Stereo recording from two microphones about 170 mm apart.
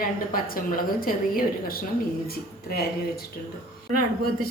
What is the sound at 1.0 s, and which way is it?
Speech, 60° left (ahead or behind).